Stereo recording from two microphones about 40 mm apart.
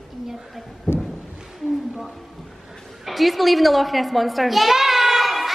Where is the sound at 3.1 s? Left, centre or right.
Centre.